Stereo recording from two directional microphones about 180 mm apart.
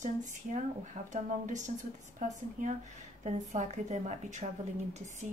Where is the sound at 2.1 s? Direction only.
40° right (ahead or behind).